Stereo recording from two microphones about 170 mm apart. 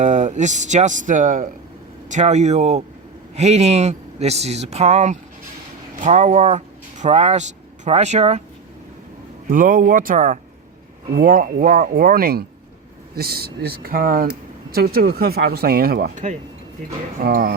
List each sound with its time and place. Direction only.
0.0 s speech: 45° right (ahead or behind)
9.5 s speech: 55° right (ahead or behind)